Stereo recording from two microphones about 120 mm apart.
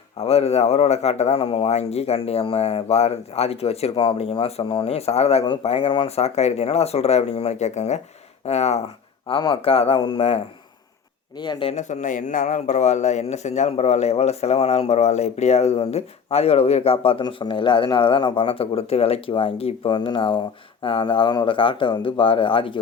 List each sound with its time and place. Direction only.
0.2 s a man's voice: 60° left (ahead or behind)
9.4 s speech: 50° left (ahead or behind)
11.3 s speech: 40° left (ahead or behind)
11.7 s a man's voice: 80° left; by 22.8 s 45° left (ahead or behind)